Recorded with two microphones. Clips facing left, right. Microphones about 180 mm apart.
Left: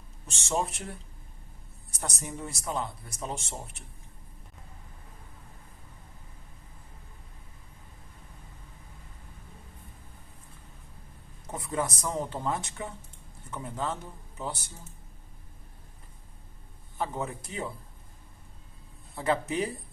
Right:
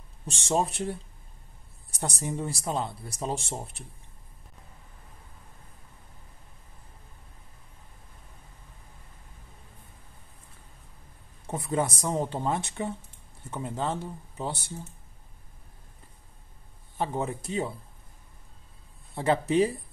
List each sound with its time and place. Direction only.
0.3 s speech: 30° right (ahead or behind)
11.4 s speech: 30° right (ahead or behind)
17.0 s speech: 30° right (ahead or behind)
19.1 s speech: 25° right (ahead or behind)